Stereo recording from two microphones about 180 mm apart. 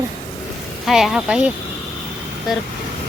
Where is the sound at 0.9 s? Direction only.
Centre (ahead or behind).